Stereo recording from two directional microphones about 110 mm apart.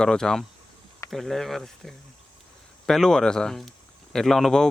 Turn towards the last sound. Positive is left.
turn(degrees=5)  # may be behind; listen again after turning